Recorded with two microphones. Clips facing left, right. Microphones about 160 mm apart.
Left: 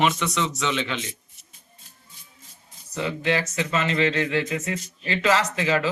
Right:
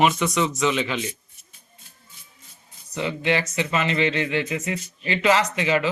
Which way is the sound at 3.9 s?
40° left (ahead or behind).